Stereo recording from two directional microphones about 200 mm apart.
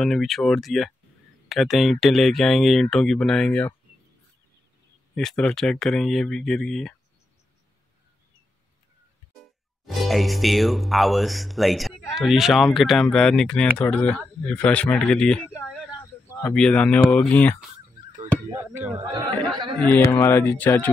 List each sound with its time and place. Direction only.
0.0 s speech: centre (ahead or behind)
5.1 s speech: 5° left (ahead or behind)
9.8 s speech: centre (ahead or behind)
16.0 s a sound: 15° left (ahead or behind)
16.5 s speech: 5° left (ahead or behind)
18.9 s speech: 20° right (ahead or behind)
19.8 s speech: 10° left (ahead or behind)